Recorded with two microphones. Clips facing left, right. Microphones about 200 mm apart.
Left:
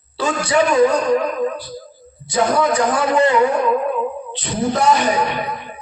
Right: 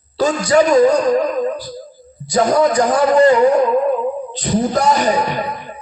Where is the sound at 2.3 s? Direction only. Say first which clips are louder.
Right 3 dB; 40° right (ahead or behind).